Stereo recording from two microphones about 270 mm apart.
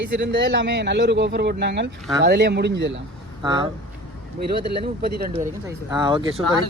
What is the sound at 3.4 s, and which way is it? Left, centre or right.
Speech, centre.